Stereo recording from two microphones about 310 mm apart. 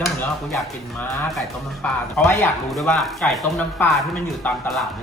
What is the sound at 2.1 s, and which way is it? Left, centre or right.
Music, centre.